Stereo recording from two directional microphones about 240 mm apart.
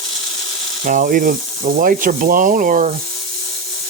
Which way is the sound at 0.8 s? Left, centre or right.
Right.